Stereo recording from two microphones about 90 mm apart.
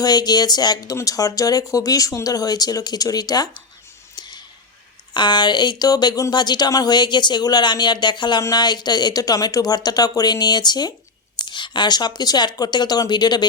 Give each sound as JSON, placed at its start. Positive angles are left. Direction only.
{"t": 0.0, "sound": "speech", "side_deg": 50}
{"t": 4.1, "sound": "clicking", "side_deg": 50}
{"t": 5.1, "sound": "speech", "side_deg": 60}
{"t": 8.4, "sound": "speech", "side_deg": 35}
{"t": 8.6, "sound": "speech", "side_deg": 50}